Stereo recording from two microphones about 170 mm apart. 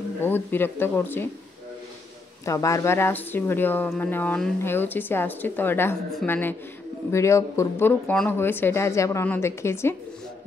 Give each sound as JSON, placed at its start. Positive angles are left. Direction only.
{"t": 0.2, "sound": "speech", "side_deg": 10}
{"t": 2.4, "sound": "speech", "side_deg": 20}